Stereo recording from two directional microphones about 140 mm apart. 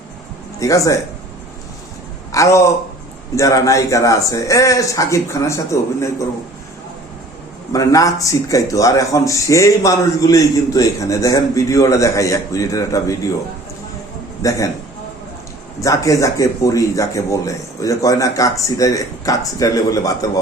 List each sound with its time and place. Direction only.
0.6 s speech: 25° left (ahead or behind)
2.3 s a man's voice: 20° left (ahead or behind)
7.7 s speech: 25° left (ahead or behind)
14.4 s speech: 25° left (ahead or behind)
15.8 s speech: 25° left (ahead or behind)